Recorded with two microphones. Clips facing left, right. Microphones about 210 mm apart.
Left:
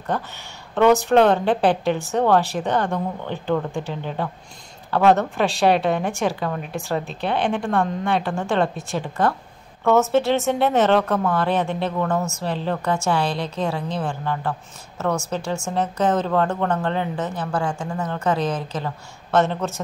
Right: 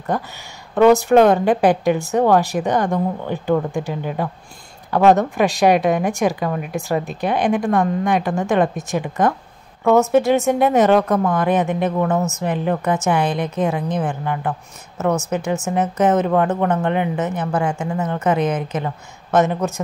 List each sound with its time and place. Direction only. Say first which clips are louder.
0.1 s a woman's voice: right 3 dB; 10° right (ahead or behind)